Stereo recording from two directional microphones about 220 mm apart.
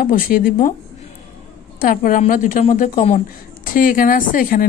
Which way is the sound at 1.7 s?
40° left (ahead or behind).